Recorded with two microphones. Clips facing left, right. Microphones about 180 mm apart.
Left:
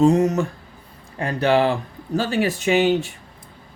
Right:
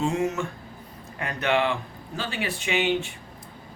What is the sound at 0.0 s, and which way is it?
Speech, 40° left (ahead or behind).